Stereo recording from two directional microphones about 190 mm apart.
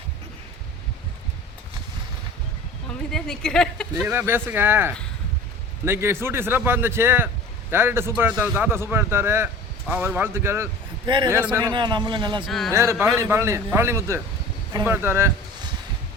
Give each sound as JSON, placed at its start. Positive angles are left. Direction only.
{"t": 3.1, "sound": "speech", "side_deg": 5}
{"t": 11.7, "sound": "a man's voice", "side_deg": -25}
{"t": 12.5, "sound": "speech", "side_deg": 0}
{"t": 12.7, "sound": "speech", "side_deg": -15}